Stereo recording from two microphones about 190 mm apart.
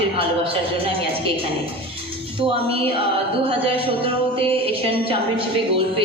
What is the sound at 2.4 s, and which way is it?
Speech, 30° right (ahead or behind).